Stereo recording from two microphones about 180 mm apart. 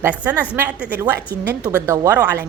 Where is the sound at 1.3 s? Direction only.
60° right (ahead or behind).